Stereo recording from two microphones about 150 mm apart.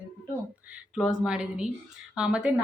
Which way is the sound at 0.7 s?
5° right (ahead or behind).